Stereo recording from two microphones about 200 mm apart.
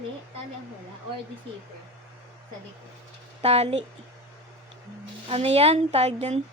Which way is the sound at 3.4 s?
30° right (ahead or behind).